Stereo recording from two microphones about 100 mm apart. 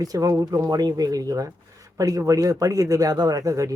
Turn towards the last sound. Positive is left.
turn(degrees=-35)  # may be behind; listen again after turning